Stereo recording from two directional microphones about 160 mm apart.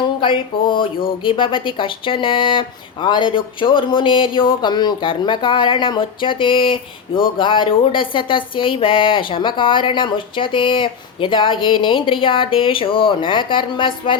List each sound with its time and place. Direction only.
0.2 s speech: 30° left (ahead or behind)